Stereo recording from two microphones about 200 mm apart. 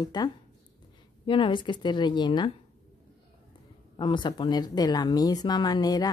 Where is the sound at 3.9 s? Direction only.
25° left (ahead or behind).